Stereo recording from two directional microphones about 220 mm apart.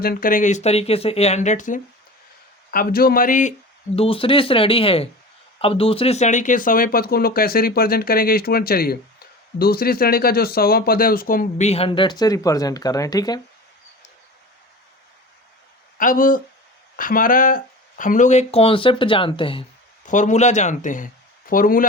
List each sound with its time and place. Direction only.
0.0 s speech: 40° left (ahead or behind)
3.9 s speech: 25° left (ahead or behind)
16.0 s speech: 40° left (ahead or behind)
20.1 s speech: 35° left (ahead or behind)